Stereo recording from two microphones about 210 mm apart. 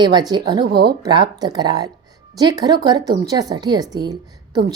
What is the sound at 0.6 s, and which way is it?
Speech, 50° right (ahead or behind).